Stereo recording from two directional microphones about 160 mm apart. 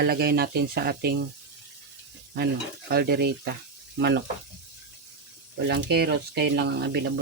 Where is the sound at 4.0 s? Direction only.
90° right.